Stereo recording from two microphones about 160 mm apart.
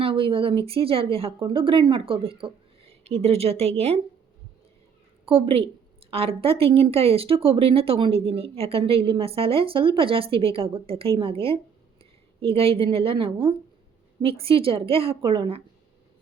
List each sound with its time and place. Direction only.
0.0 s a woman's voice: 35° right (ahead or behind)
5.2 s a woman's voice: 35° right (ahead or behind)